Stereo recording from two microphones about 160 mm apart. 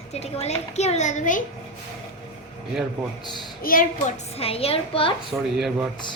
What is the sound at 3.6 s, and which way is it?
A child's voice, 60° left (ahead or behind).